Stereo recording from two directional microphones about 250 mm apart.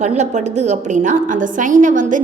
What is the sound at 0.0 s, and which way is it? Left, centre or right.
A woman's voice, right.